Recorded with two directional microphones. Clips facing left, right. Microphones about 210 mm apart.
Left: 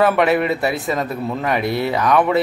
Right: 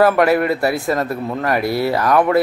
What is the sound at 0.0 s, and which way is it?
Speech, centre (ahead or behind).